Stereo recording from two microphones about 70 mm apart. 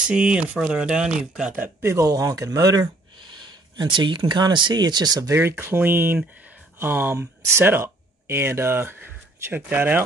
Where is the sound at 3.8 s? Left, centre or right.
Right.